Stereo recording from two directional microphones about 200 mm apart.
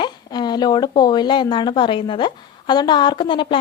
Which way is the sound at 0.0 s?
20° left (ahead or behind).